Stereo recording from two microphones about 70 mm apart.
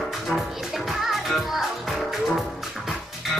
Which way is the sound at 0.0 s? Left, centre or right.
Centre.